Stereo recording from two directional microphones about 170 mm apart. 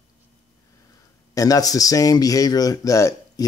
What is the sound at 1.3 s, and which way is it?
Speech, 20° left (ahead or behind).